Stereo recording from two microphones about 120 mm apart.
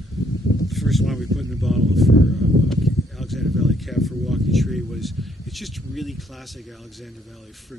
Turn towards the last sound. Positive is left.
turn(degrees=0)  # may be behind; listen again after turning